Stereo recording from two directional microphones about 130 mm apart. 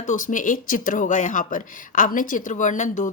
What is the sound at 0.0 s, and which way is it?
Speech, 85° left.